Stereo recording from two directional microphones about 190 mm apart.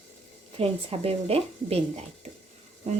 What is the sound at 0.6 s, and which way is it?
Speech, 30° right (ahead or behind).